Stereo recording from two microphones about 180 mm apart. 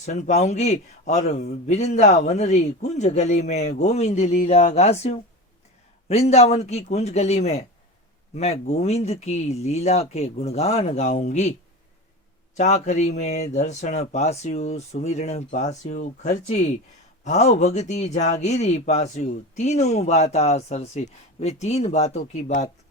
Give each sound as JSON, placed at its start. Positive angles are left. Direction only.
{"t": 0.0, "sound": "a man's voice", "side_deg": 40}
{"t": 12.5, "sound": "a man's voice", "side_deg": 40}